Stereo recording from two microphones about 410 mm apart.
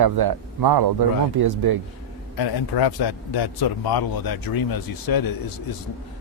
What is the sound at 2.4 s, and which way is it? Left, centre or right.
Speech, left.